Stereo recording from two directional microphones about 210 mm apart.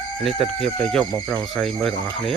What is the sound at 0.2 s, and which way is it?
Speech, centre (ahead or behind).